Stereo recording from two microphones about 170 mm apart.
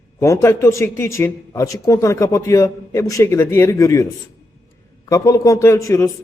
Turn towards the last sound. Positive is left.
turn(degrees=20)  # may be behind; listen again after turning